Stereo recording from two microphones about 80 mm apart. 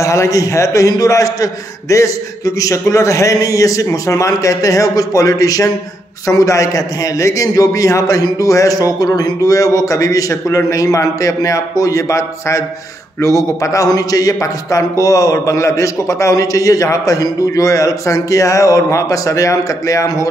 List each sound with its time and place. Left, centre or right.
0.0 s speech: left